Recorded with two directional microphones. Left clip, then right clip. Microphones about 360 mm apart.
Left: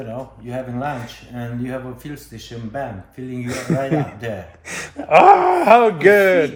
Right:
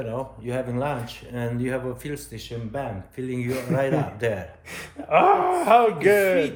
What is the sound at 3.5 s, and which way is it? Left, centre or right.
Speech, left.